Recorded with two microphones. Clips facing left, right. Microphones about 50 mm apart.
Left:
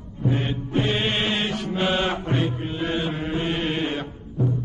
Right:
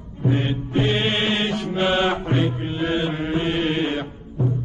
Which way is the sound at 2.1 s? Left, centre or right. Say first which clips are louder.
Right 3 dB; right.